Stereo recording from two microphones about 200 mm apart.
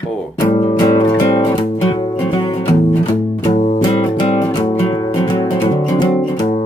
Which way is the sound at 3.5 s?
35° left (ahead or behind).